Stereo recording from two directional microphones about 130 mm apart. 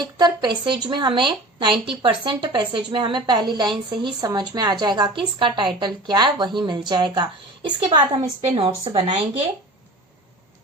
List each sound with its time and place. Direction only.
0.0 s a woman's voice: 35° right (ahead or behind)
8.4 s speech: 45° right (ahead or behind)